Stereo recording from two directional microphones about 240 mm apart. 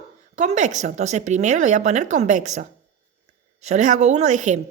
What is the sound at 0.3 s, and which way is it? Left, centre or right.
A woman's voice, right.